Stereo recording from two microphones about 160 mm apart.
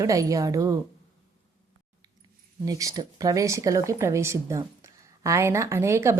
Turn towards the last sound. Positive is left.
turn(degrees=-15)  # may be behind; listen again after turning